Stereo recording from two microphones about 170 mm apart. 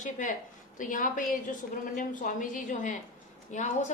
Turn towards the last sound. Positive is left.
turn(degrees=45)  # may be behind; listen again after turning